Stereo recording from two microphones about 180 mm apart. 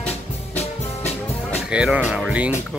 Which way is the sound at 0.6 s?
35° left (ahead or behind).